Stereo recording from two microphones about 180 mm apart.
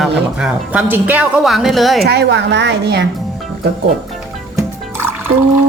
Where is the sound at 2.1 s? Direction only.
70° right (ahead or behind).